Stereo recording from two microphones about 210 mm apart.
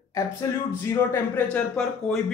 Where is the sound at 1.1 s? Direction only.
10° left (ahead or behind).